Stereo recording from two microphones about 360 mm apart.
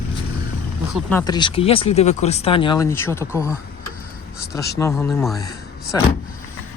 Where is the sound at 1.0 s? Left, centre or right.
Centre.